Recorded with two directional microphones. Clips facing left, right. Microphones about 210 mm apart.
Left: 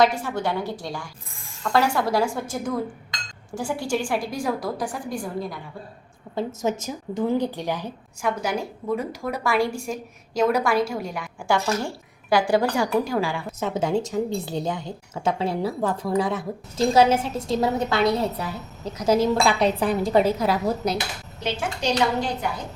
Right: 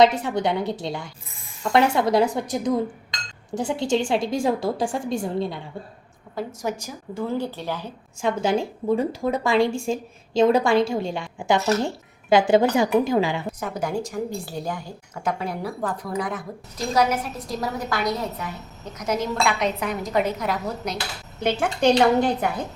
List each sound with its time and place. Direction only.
0.0 s a woman's voice: 20° right (ahead or behind)
6.3 s speech: 25° left (ahead or behind)
8.2 s a woman's voice: 25° right (ahead or behind)
13.6 s a woman's voice: 25° left (ahead or behind)
21.4 s a woman's voice: 55° right (ahead or behind)